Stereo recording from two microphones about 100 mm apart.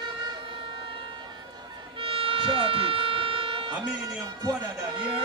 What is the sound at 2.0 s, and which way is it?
Music, 70° right (ahead or behind).